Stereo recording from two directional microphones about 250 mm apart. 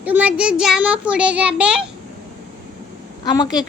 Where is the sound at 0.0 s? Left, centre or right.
Centre.